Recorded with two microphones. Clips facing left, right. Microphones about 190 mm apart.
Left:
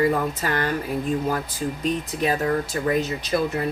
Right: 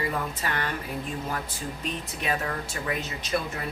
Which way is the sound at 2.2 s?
35° left (ahead or behind).